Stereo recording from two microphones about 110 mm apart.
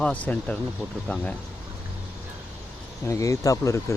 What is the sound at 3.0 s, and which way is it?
Speech, 30° left (ahead or behind).